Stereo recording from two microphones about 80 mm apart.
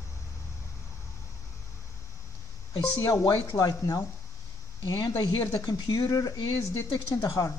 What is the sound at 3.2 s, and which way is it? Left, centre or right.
Speech, left.